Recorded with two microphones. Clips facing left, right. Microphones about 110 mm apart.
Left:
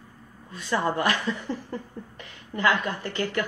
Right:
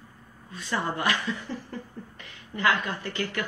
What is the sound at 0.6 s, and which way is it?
Speech, 35° left (ahead or behind).